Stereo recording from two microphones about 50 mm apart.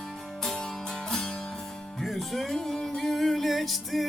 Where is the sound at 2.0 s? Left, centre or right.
Centre.